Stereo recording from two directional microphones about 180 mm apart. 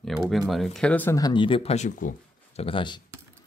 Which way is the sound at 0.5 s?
Centre (ahead or behind).